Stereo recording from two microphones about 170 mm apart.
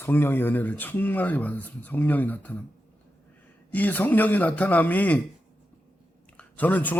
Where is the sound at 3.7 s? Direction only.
10° left (ahead or behind).